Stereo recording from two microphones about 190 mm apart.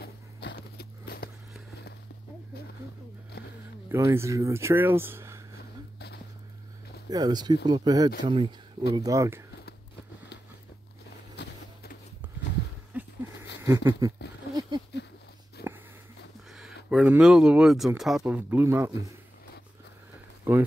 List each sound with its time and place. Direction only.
0.0 s walk: 60° left (ahead or behind)
3.9 s speech: 15° right (ahead or behind)
5.9 s music: 60° left (ahead or behind)
7.1 s speech: 20° right (ahead or behind)
11.4 s a sound: 60° left (ahead or behind)
13.6 s a sound: 15° right (ahead or behind)
15.6 s wheeze: 55° left (ahead or behind)
16.4 s speech: centre (ahead or behind)
20.5 s speech: 10° right (ahead or behind)